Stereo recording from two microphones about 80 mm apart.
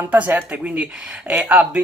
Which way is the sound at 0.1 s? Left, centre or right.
Right.